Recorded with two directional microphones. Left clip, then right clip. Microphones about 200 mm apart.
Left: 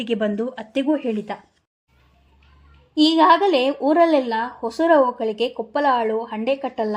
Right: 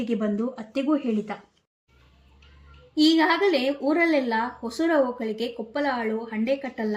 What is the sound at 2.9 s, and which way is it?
A woman's voice, 20° left (ahead or behind).